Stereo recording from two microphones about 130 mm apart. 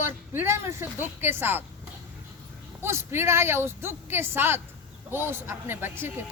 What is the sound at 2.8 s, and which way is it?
A woman's voice, 20° right (ahead or behind).